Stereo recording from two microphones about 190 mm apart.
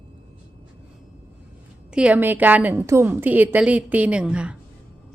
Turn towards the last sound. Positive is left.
turn(degrees=-5)  # may be behind; listen again after turning